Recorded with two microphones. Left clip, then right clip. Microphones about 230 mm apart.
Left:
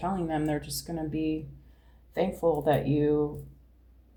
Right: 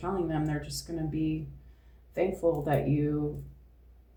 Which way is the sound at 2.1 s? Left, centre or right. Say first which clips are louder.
Left 1 dB; left.